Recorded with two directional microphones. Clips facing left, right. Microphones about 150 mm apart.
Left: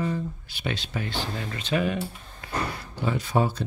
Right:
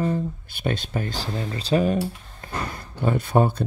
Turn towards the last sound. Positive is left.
turn(degrees=-55)  # may be behind; listen again after turning